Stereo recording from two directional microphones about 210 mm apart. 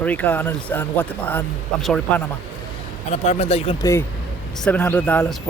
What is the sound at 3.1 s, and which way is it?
Speech, 30° left (ahead or behind).